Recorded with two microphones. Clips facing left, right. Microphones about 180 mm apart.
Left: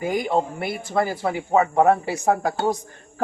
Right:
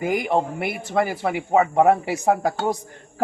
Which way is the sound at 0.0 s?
20° right (ahead or behind).